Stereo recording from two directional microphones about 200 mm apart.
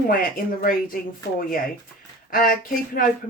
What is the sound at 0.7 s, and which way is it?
Speech, 45° left (ahead or behind).